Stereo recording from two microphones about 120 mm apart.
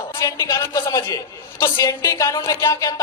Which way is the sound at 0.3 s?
30° left (ahead or behind).